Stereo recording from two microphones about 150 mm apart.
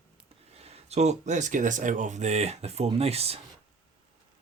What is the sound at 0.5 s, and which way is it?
Speech, 45° right (ahead or behind).